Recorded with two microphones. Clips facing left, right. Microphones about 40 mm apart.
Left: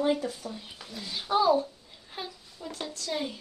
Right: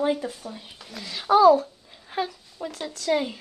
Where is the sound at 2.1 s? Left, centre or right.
Right.